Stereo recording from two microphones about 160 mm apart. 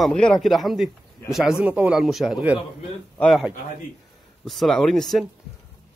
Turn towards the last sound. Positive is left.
turn(degrees=0)  # may be behind; listen again after turning